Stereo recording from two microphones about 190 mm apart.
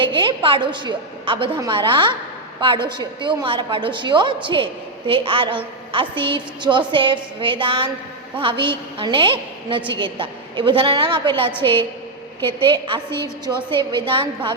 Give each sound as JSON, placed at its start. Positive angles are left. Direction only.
{"t": 0.0, "sound": "a woman's voice", "side_deg": -25}
{"t": 11.6, "sound": "a woman's voice", "side_deg": 10}
{"t": 12.5, "sound": "a woman's voice", "side_deg": -25}